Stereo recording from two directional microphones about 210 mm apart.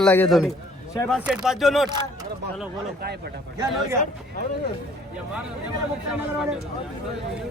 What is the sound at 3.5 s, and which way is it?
Speech, 15° right (ahead or behind).